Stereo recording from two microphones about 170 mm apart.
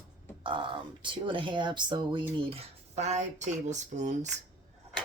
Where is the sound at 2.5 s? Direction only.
40° right (ahead or behind).